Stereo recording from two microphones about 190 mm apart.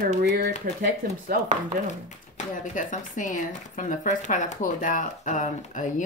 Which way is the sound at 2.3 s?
40° left (ahead or behind).